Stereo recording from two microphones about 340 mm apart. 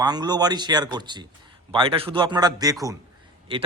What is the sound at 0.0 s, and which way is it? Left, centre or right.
A man's voice, centre.